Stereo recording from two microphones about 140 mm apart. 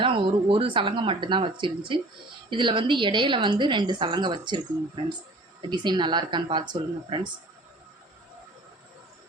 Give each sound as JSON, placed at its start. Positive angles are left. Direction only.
{"t": 0.0, "sound": "a woman's voice", "side_deg": -40}
{"t": 5.6, "sound": "a woman's voice", "side_deg": -30}